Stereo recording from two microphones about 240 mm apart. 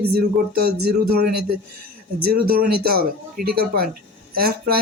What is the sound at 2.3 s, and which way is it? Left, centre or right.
Speech, right.